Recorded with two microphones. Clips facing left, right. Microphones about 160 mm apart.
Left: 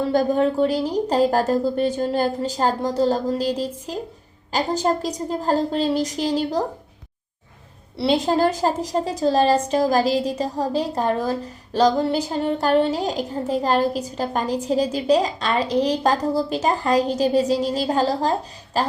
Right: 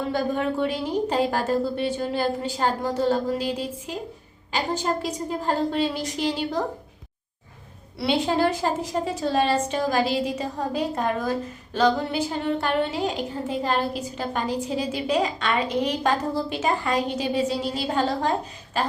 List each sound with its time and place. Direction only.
0.1 s a woman's voice: 40° left (ahead or behind)
7.9 s a woman's voice: 35° left (ahead or behind)